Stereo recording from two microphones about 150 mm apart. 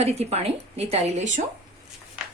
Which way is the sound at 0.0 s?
45° right (ahead or behind).